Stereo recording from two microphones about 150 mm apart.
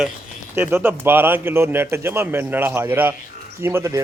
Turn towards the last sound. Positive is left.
turn(degrees=-20)  # may be behind; listen again after turning